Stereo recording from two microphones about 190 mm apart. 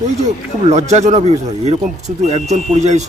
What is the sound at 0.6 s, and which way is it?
Speech, 35° right (ahead or behind).